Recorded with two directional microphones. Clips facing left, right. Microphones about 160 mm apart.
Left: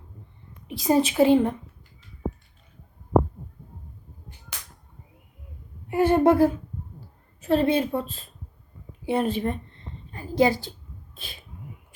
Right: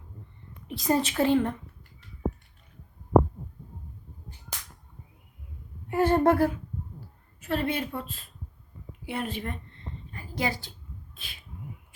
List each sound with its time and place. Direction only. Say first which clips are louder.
0.7 s speech: left 5 dB; 10° left (ahead or behind)
4.5 s whip: right 1 dB; 40° right (ahead or behind)
5.9 s speech: left 3 dB; 10° left (ahead or behind)
7.4 s a woman's voice: left 8 dB; 30° left (ahead or behind)
10.1 s a sound: left 10 dB; 30° left (ahead or behind)